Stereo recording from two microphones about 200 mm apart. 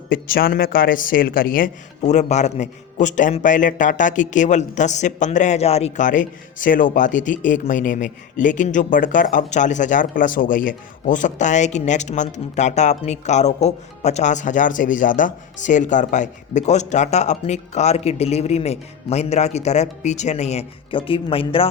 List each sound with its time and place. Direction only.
0.1 s speech: 45° left (ahead or behind); by 21.7 s 25° left (ahead or behind)